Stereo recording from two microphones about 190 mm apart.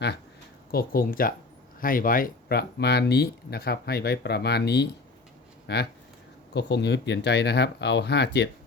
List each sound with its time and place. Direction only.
0.7 s speech: 50° left (ahead or behind)